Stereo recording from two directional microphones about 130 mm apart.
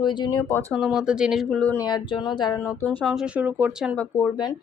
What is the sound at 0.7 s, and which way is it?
Speech, centre (ahead or behind).